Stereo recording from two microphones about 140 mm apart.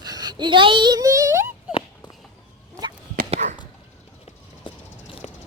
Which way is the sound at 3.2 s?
50° right (ahead or behind).